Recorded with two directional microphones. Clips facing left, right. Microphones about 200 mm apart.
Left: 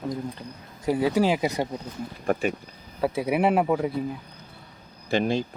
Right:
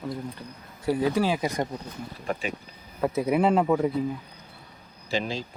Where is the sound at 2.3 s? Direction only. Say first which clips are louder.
Left 6 dB; 50° left (ahead or behind).